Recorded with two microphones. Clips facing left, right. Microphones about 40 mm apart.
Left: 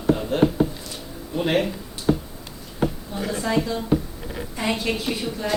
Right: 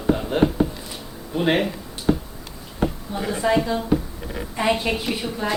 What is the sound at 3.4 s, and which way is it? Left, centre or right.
A woman's voice, centre.